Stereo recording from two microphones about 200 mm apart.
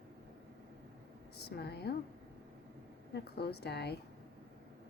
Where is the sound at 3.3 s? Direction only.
55° left (ahead or behind).